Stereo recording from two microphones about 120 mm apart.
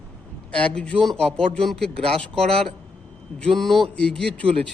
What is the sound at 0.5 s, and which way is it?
A man's voice, 10° left (ahead or behind).